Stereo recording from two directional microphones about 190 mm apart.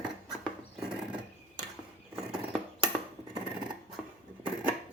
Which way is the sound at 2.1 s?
Centre (ahead or behind).